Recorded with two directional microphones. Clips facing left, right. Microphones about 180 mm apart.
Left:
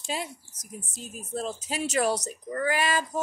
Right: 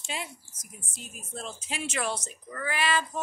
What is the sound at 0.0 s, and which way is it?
A woman's voice, 35° left (ahead or behind).